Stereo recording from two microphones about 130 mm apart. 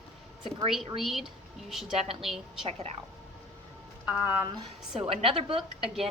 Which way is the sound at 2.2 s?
Centre (ahead or behind).